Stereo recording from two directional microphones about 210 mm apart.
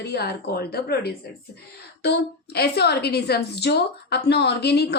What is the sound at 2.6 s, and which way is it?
A woman's voice, 50° left (ahead or behind).